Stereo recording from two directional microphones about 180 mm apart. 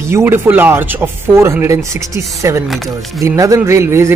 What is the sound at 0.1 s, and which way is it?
Speech, 10° right (ahead or behind).